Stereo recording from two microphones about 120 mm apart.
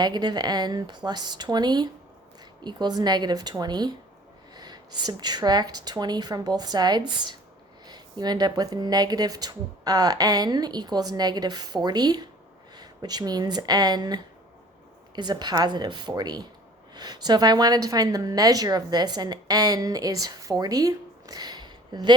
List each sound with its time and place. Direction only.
0.0 s speech: 35° right (ahead or behind)